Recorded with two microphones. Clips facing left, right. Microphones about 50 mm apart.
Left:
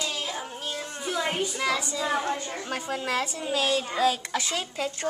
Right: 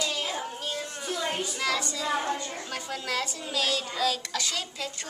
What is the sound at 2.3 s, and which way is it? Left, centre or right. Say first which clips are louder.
A child's voice: left 3 dB; left.